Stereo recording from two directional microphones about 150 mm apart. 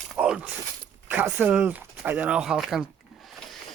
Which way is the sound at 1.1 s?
10° right (ahead or behind).